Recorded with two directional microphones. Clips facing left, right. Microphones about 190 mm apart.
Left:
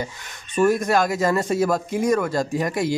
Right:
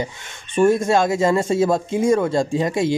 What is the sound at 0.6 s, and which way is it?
Speech, 25° right (ahead or behind).